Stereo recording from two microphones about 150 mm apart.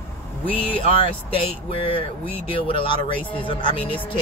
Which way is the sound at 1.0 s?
40° left (ahead or behind).